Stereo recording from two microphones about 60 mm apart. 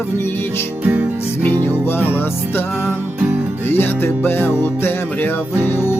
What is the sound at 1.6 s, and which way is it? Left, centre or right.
Music, left.